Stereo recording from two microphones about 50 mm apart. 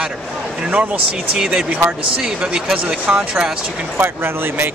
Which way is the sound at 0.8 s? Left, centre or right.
Right.